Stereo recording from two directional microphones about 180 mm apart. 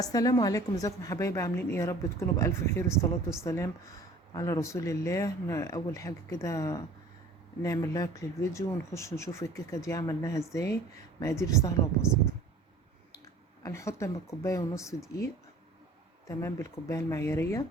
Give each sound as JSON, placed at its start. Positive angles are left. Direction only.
{"t": 0.0, "sound": "a woman's voice", "side_deg": 20}
{"t": 13.6, "sound": "a woman's voice", "side_deg": 15}
{"t": 16.2, "sound": "a woman's voice", "side_deg": 15}